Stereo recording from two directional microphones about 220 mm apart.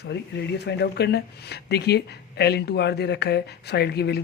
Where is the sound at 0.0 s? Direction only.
50° left (ahead or behind).